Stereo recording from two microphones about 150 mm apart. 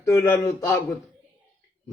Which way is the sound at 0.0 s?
20° left (ahead or behind).